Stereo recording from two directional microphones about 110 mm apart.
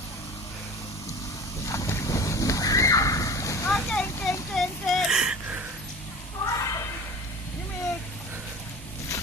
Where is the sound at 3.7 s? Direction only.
5° left (ahead or behind).